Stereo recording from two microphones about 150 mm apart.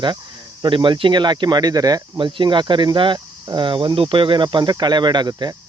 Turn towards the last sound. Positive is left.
turn(degrees=-25)  # may be behind; listen again after turning